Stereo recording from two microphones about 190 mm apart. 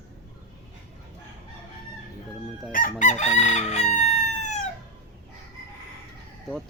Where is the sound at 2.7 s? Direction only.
45° left (ahead or behind).